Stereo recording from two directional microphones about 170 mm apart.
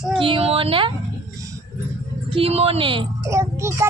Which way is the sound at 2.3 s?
35° right (ahead or behind).